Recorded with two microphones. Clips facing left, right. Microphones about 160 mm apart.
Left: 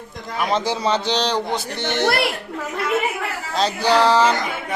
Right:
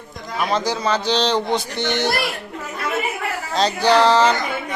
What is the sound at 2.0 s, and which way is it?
Speech, 70° left (ahead or behind).